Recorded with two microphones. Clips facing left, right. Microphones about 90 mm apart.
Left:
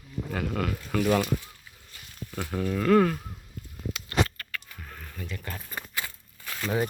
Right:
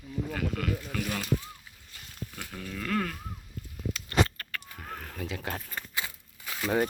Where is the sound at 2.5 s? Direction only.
40° left (ahead or behind).